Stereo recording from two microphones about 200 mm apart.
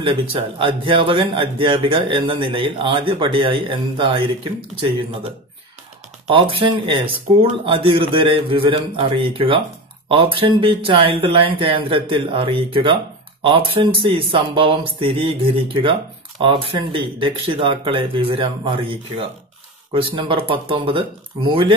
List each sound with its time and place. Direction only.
0.0 s speech: 25° right (ahead or behind)
6.2 s speech: 25° right (ahead or behind)